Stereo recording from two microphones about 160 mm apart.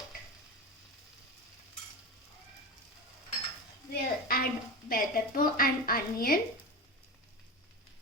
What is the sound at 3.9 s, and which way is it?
A woman's voice, 70° left (ahead or behind).